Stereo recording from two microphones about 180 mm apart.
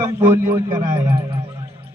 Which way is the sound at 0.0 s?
15° right (ahead or behind).